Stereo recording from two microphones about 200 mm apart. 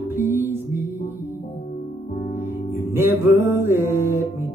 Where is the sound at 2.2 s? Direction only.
45° left (ahead or behind).